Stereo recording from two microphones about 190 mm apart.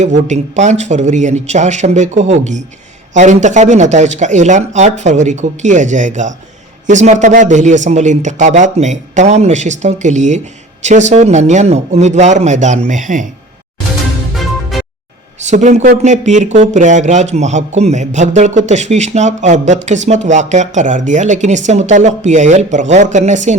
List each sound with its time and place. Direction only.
0.0 s a man's voice: 40° right (ahead or behind)
15.4 s a man's voice: 40° right (ahead or behind)